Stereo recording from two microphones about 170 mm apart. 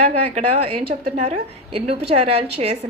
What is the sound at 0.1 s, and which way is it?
A woman's voice, 40° right (ahead or behind).